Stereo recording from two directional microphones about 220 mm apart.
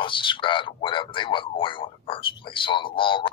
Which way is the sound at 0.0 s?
20° left (ahead or behind).